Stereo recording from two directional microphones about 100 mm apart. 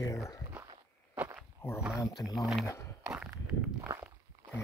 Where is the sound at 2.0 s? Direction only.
40° left (ahead or behind).